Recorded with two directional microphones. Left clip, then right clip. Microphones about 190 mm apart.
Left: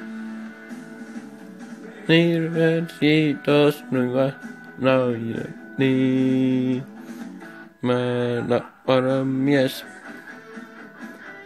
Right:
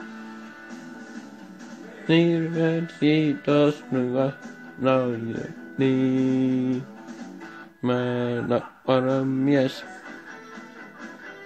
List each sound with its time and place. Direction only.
2.0 s music: 15° left (ahead or behind)
7.8 s music: 10° left (ahead or behind)